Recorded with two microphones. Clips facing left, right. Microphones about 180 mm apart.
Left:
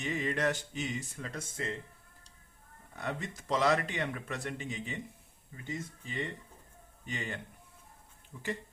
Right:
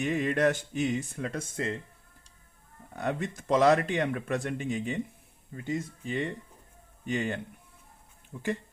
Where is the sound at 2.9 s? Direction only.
50° right (ahead or behind).